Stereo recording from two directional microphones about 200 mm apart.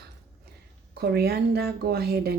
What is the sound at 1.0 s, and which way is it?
Speech, 50° right (ahead or behind).